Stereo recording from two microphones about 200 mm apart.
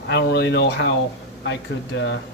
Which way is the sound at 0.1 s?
55° left (ahead or behind).